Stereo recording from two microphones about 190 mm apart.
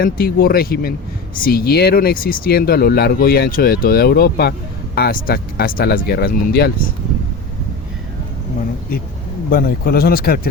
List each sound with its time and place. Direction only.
0.0 s speech: 50° left (ahead or behind)
9.5 s speech: 50° left (ahead or behind)